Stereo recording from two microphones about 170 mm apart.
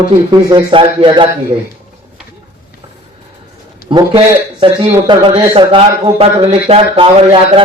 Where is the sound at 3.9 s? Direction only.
30° right (ahead or behind).